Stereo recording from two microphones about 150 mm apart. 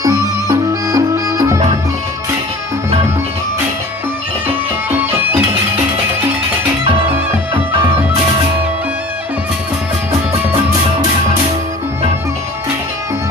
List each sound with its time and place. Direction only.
0.0 s music: 20° right (ahead or behind)
6.9 s music: 35° right (ahead or behind)
10.5 s music: 25° right (ahead or behind)